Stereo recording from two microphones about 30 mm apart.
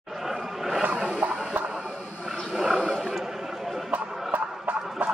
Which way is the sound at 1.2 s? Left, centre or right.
Right.